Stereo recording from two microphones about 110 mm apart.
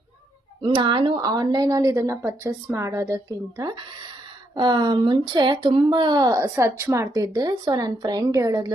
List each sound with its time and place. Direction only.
0.6 s a woman's voice: 45° right (ahead or behind)